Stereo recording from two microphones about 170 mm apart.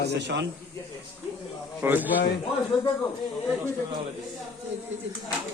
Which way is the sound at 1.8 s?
10° right (ahead or behind).